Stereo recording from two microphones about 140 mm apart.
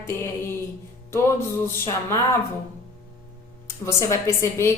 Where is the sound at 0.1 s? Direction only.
20° left (ahead or behind).